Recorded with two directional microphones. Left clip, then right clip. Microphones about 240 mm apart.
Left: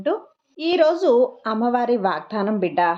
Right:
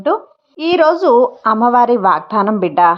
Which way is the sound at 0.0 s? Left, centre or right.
Centre.